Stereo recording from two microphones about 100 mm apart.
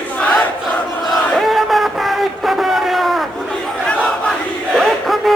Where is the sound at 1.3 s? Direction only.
Centre (ahead or behind).